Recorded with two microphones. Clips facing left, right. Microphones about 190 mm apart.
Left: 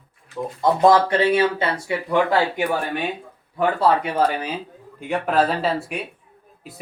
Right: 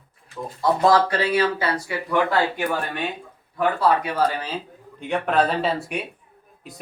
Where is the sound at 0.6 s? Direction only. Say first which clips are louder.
Left 2 dB; 20° left (ahead or behind).